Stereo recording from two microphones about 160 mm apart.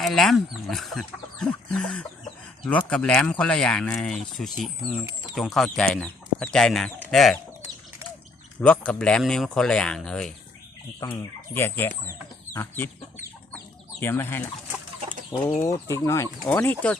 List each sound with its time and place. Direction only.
0.0 s speech: centre (ahead or behind)
8.6 s speech: 5° left (ahead or behind)
14.0 s speech: 15° left (ahead or behind)
15.6 s speech: 20° left (ahead or behind)